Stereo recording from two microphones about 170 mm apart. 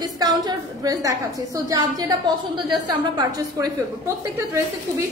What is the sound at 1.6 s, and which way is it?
A woman's voice, 25° right (ahead or behind).